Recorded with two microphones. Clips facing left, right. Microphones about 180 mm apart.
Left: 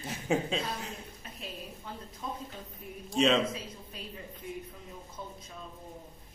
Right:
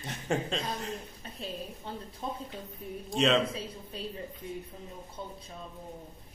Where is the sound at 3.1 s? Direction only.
Centre (ahead or behind).